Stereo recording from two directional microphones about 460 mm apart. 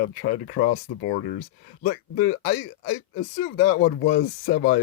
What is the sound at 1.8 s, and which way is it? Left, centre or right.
Speech, centre.